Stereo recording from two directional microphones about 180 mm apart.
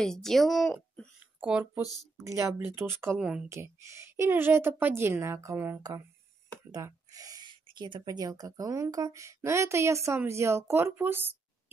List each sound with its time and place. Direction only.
0.0 s speech: centre (ahead or behind)
2.1 s speech: 15° right (ahead or behind)